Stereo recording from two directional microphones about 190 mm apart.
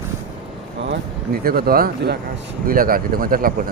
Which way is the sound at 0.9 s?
55° right (ahead or behind).